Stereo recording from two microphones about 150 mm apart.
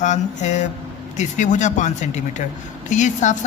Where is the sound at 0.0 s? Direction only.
50° left (ahead or behind).